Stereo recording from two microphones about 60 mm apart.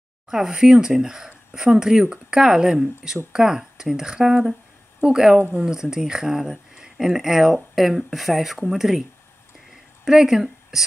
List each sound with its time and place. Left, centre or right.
0.3 s speech: centre
10.0 s speech: centre